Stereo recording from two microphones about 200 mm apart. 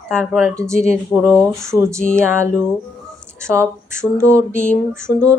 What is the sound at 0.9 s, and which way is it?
Speech, 15° right (ahead or behind).